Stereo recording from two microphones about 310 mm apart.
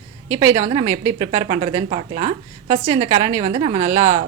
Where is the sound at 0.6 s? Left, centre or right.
Centre.